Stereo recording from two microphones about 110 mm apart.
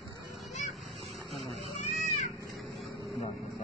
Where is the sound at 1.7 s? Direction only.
85° left.